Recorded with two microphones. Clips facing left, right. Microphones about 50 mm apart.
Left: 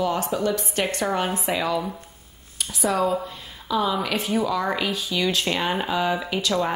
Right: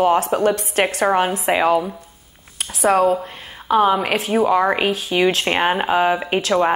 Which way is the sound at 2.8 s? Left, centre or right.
Right.